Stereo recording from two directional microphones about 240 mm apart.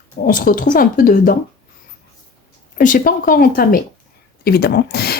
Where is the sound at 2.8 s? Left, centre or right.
Left.